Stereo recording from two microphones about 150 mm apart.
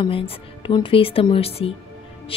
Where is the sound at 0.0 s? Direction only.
35° left (ahead or behind).